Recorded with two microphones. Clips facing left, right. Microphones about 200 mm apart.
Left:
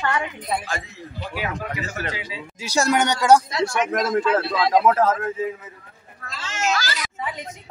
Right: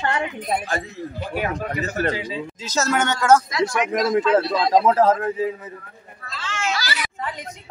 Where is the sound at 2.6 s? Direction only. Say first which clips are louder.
Left 2 dB; 15° left (ahead or behind).